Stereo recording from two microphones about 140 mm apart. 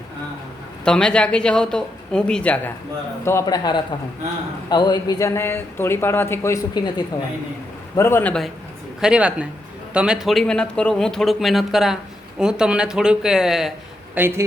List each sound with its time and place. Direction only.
0.9 s speech: 5° left (ahead or behind)
3.2 s speech: 25° left (ahead or behind)
7.9 s speech: 15° left (ahead or behind)
9.0 s speech: 5° right (ahead or behind)
14.2 s speech: 15° right (ahead or behind)